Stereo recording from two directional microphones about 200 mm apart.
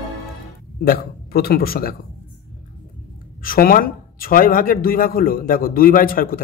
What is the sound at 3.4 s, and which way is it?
A man's voice, 45° left (ahead or behind).